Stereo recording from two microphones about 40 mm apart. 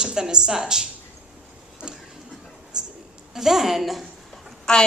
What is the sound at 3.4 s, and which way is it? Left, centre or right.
Speech, centre.